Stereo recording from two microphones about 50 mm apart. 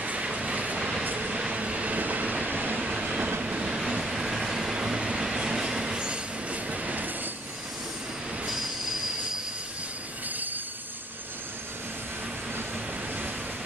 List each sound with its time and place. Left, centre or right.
0.0 s vehicle: right
1.1 s train: right
2.8 s train: centre
6.5 s train: right